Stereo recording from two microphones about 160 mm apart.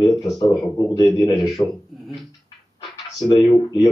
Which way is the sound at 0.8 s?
20° left (ahead or behind).